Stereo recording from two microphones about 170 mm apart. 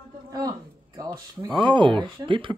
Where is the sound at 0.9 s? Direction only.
20° right (ahead or behind).